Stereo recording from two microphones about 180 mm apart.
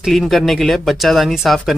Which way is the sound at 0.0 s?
Centre (ahead or behind).